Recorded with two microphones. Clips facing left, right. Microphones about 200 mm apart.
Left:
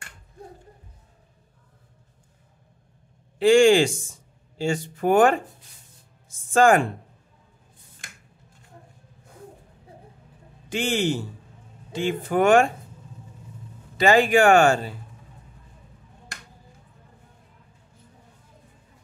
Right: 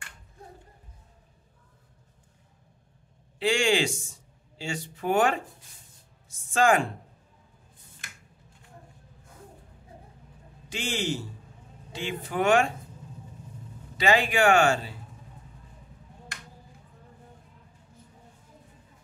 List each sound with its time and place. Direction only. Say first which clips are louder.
3.3 s speech: left 9 dB; 50° left (ahead or behind)
6.5 s speech: left 5 dB; 50° left (ahead or behind)
10.7 s a man's voice: left 7 dB; 55° left (ahead or behind)
13.9 s speech: left 6 dB; 45° left (ahead or behind)